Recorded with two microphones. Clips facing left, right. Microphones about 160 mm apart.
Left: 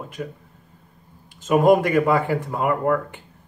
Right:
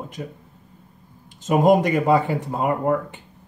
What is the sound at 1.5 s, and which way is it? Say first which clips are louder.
Speech: left 1 dB; 20° right (ahead or behind).